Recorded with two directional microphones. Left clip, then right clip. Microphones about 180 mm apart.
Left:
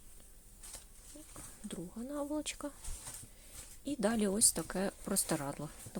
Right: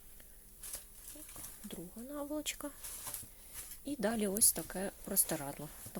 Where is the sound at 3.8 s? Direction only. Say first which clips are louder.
Left 2 dB; 15° left (ahead or behind).